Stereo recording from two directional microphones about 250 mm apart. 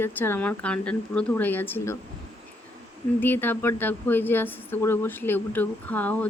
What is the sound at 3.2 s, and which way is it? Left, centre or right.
Speech, centre.